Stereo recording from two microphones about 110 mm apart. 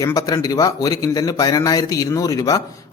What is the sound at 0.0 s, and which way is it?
A man's voice, 35° left (ahead or behind).